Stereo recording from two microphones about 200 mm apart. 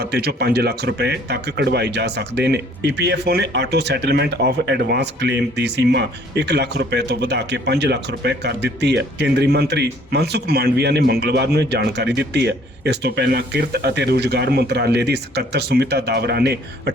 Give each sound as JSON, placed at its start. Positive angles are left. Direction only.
{"t": 0.0, "sound": "speech", "side_deg": -55}